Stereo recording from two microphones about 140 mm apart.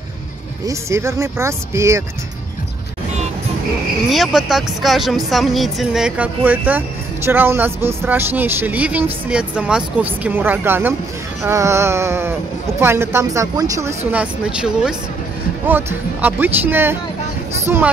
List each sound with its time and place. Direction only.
0.7 s speech: 20° right (ahead or behind)
4.1 s speech: centre (ahead or behind); by 13.9 s 20° right (ahead or behind)
14.1 s speech: 10° right (ahead or behind)